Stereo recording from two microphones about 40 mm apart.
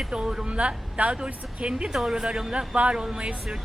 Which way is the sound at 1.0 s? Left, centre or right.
Right.